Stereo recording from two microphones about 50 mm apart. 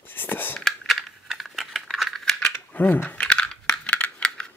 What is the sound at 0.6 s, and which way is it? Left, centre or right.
Coin, centre.